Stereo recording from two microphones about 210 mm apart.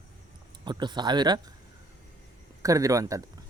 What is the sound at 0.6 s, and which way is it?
Speech, 20° right (ahead or behind).